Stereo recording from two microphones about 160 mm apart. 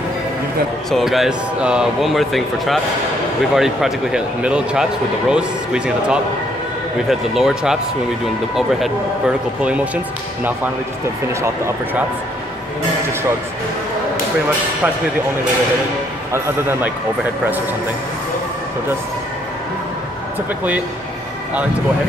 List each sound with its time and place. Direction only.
0.8 s speech: centre (ahead or behind)
11.4 s a man's voice: 15° right (ahead or behind)
16.3 s a man's voice: 15° right (ahead or behind)